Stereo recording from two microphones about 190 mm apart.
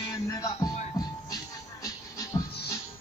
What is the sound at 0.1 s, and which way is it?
Music, 20° left (ahead or behind).